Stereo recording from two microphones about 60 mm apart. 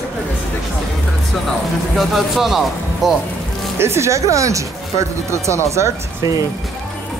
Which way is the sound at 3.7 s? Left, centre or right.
Right.